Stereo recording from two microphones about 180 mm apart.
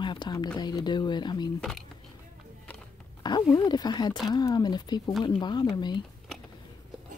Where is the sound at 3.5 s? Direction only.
25° left (ahead or behind).